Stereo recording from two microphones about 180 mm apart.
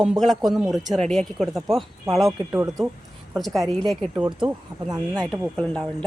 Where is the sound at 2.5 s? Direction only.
15° right (ahead or behind).